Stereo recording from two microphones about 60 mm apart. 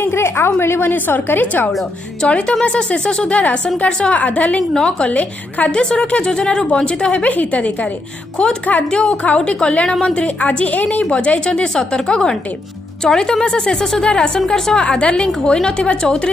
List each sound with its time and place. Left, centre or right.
0.0 s a woman's voice: left
2.2 s a woman's voice: centre